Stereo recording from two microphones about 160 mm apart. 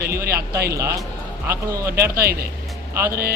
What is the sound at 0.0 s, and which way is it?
Speech, 75° right (ahead or behind).